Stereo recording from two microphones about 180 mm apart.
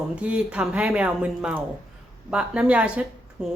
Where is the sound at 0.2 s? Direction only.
5° right (ahead or behind).